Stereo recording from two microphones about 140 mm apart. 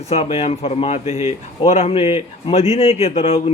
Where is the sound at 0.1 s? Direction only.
50° left (ahead or behind).